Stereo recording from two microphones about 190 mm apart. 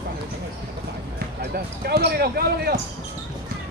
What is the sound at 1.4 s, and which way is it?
Speech, 55° right (ahead or behind).